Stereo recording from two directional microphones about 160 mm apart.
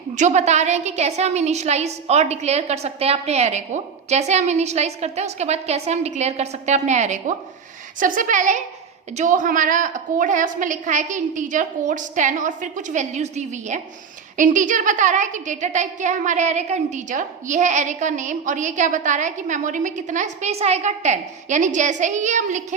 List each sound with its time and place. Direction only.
0.2 s a woman's voice: 45° right (ahead or behind)